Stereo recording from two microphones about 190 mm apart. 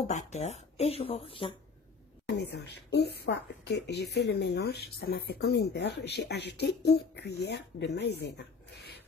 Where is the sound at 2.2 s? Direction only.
65° left (ahead or behind).